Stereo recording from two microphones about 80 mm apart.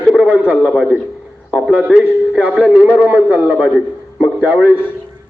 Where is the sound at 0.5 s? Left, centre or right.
Centre.